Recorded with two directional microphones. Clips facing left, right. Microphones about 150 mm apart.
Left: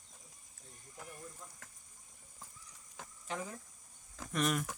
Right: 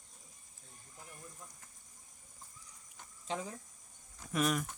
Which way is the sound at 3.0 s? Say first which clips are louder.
Left 6 dB; 90° left.